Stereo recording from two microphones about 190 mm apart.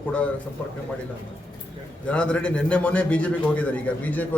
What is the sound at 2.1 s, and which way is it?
A man's voice, 5° left (ahead or behind).